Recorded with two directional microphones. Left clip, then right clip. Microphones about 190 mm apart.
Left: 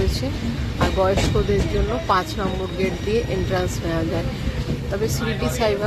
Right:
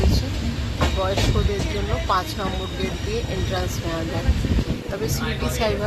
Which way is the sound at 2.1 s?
20° left (ahead or behind).